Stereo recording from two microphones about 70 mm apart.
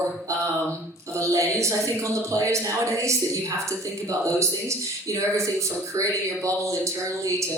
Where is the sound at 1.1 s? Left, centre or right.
Right.